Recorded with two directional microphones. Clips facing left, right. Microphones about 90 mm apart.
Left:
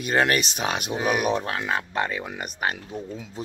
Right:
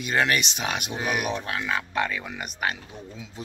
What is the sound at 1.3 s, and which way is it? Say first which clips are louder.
Speech: left 3 dB; 35° left (ahead or behind).